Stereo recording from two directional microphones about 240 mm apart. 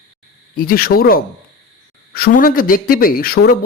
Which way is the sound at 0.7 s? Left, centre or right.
Left.